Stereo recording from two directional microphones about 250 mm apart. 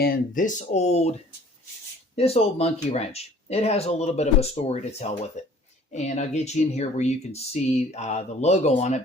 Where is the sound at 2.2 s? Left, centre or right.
Left.